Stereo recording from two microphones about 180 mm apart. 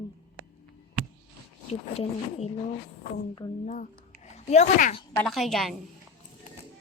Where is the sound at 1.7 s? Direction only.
35° left (ahead or behind).